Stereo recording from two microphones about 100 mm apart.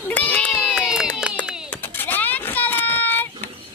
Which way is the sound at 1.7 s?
20° left (ahead or behind).